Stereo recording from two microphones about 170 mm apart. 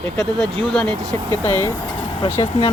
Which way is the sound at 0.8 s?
10° left (ahead or behind).